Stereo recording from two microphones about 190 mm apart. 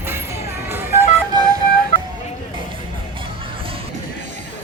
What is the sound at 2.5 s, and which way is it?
Music, 25° right (ahead or behind).